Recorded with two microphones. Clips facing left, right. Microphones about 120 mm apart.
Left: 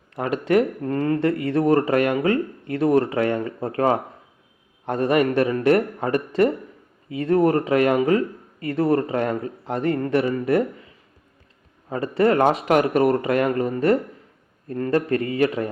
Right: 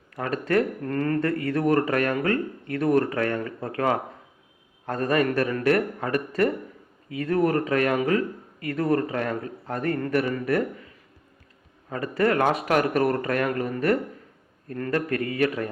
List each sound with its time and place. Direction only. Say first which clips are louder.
0.1 s speech: left 4 dB; 25° left (ahead or behind)
11.9 s speech: left 4 dB; 25° left (ahead or behind)